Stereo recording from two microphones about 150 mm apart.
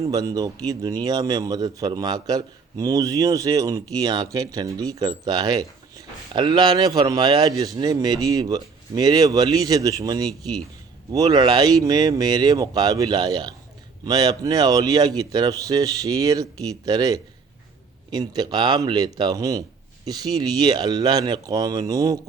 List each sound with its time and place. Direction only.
0.1 s a man's voice: 25° right (ahead or behind)